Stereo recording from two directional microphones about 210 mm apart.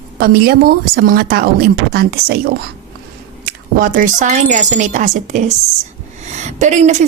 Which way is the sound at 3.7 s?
40° right (ahead or behind).